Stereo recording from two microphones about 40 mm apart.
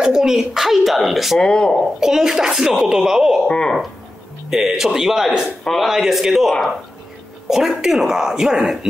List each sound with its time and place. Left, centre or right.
0.0 s speech: centre
1.4 s speech: left
2.0 s speech: centre
3.4 s speech: left
4.5 s speech: centre
5.6 s speech: centre
5.9 s speech: centre